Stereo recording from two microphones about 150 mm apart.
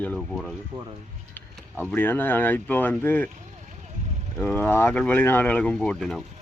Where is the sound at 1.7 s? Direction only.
10° left (ahead or behind).